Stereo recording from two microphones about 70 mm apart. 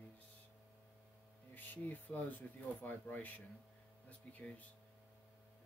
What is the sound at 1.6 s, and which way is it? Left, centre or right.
Speech, left.